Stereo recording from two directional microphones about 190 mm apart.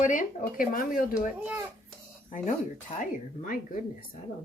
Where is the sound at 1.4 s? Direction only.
5° right (ahead or behind).